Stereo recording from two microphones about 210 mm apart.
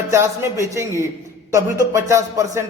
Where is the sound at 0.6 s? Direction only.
15° right (ahead or behind).